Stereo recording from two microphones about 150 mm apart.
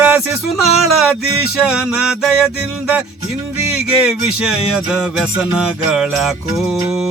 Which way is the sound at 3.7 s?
5° right (ahead or behind).